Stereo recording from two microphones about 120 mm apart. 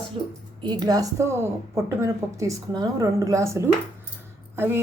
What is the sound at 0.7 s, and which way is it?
A woman's voice, 35° right (ahead or behind).